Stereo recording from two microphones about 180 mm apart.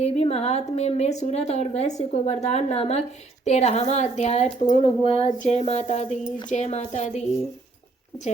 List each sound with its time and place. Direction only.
0.0 s a woman's voice: 35° left (ahead or behind)